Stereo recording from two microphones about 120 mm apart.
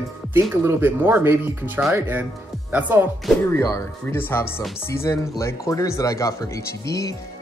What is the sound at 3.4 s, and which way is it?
Speech, 25° left (ahead or behind).